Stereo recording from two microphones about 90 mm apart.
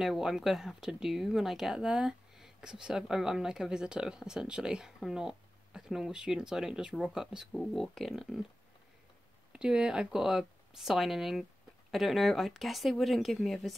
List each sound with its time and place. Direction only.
0.0 s speech: 5° right (ahead or behind)
9.5 s speech: 10° right (ahead or behind)